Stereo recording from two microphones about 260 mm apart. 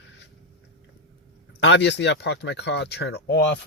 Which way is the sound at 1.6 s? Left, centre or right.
Left.